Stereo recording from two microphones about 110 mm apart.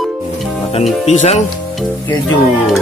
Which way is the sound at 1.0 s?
90° left.